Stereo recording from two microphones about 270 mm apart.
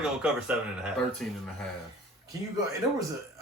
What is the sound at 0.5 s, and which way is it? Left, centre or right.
Speech, centre.